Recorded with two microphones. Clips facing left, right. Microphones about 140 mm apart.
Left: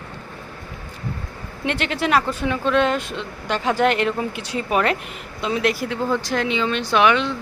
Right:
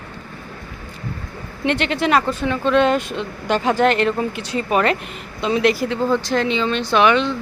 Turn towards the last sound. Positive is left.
turn(degrees=5)  # may be behind; listen again after turning